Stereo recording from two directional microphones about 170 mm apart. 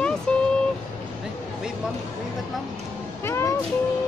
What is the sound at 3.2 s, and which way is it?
Music, 15° left (ahead or behind).